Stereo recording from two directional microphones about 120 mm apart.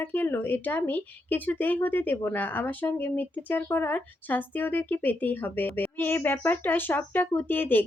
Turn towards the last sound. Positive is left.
turn(degrees=15)  # may be behind; listen again after turning